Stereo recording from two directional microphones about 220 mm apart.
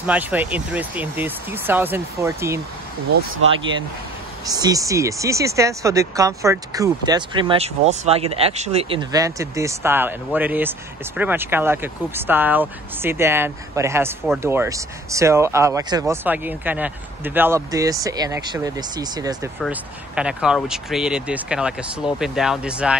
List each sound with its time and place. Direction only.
0.0 s speech: 5° right (ahead or behind)
3.3 s speech: 65° right (ahead or behind)
4.5 s speech: 15° right (ahead or behind)
19.6 s speech: 5° right (ahead or behind)